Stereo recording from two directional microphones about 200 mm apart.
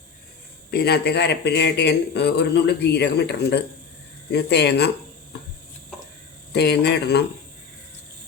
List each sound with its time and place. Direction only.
0.7 s speech: 55° left (ahead or behind)
6.5 s speech: 60° left (ahead or behind)